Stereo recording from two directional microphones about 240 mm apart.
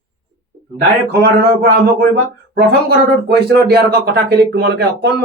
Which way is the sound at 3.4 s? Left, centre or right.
Right.